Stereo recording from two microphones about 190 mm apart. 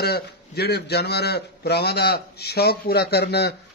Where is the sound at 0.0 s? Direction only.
55° left (ahead or behind).